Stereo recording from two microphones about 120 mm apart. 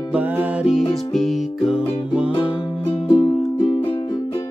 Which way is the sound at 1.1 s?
Centre (ahead or behind).